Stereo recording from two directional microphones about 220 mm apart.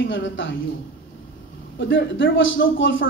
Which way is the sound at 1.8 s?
60° left (ahead or behind).